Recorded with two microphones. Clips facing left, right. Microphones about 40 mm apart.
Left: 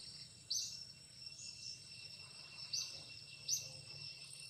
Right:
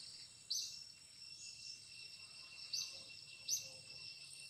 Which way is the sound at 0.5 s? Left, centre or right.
Centre.